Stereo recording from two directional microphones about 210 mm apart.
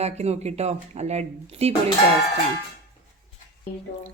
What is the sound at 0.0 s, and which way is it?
Speech, 30° right (ahead or behind).